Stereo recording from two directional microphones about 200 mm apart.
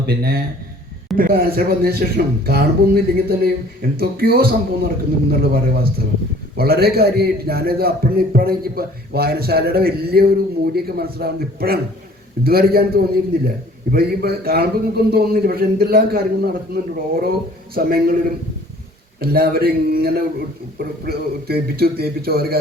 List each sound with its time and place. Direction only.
0.0 s a man's voice: 50° right (ahead or behind)
6.6 s a man's voice: 50° right (ahead or behind)
19.2 s a man's voice: 50° right (ahead or behind)